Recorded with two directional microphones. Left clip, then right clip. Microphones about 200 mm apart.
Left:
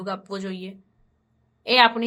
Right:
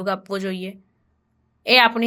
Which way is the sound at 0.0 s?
20° right (ahead or behind).